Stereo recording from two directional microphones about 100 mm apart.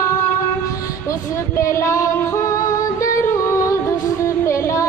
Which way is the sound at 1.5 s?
30° left (ahead or behind).